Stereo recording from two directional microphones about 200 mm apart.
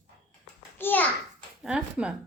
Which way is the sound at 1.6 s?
5° right (ahead or behind).